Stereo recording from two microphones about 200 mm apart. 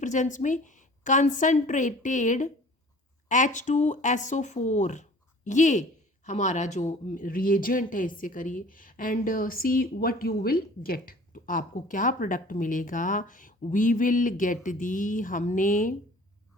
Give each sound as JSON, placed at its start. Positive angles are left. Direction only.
{"t": 0.0, "sound": "a woman's voice", "side_deg": 40}